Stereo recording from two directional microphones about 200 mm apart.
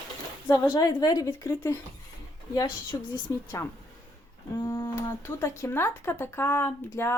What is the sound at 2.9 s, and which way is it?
Speech, 15° left (ahead or behind).